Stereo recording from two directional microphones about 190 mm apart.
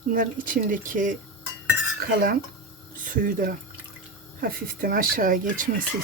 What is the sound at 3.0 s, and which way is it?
Speech, 45° right (ahead or behind).